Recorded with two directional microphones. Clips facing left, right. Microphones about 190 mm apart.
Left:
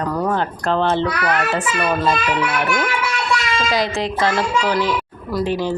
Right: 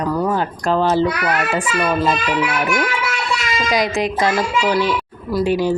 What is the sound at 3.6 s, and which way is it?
A child's voice, 20° right (ahead or behind).